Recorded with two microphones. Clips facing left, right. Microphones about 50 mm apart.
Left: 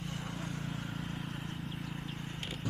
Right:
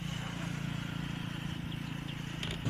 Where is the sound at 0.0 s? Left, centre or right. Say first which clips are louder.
Right 1 dB; right.